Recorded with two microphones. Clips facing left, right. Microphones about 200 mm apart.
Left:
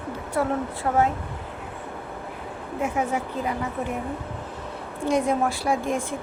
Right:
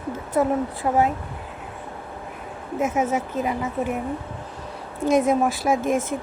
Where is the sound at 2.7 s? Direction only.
20° right (ahead or behind).